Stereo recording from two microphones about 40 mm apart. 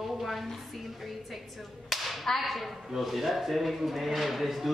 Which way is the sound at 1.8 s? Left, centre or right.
Centre.